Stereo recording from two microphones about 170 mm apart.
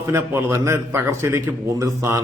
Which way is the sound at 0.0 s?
15° right (ahead or behind).